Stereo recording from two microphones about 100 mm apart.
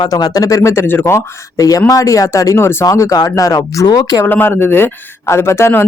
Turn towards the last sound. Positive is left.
turn(degrees=25)  # may be behind; listen again after turning